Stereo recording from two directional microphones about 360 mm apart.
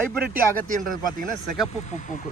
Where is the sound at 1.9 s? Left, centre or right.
Centre.